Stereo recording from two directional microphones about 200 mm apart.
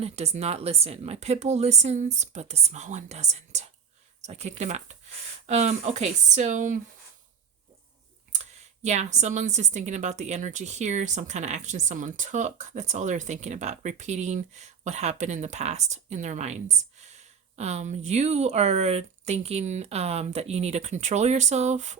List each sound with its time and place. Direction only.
0.0 s speech: 35° right (ahead or behind)
8.3 s speech: 35° right (ahead or behind)